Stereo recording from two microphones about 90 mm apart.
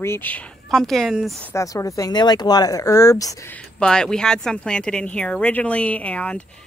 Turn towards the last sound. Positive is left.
turn(degrees=15)  # may be behind; listen again after turning